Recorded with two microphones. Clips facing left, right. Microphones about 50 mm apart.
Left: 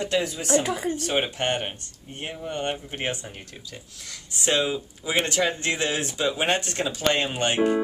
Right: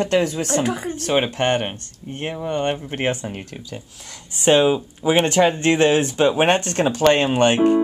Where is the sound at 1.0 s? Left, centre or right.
Right.